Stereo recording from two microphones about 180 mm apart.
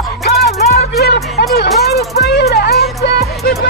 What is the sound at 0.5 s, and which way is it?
Music, 60° left (ahead or behind).